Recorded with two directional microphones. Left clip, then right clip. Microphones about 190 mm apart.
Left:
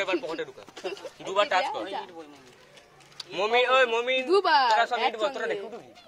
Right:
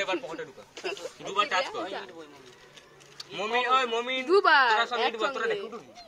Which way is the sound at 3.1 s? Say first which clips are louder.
Left 4 dB; 60° left (ahead or behind).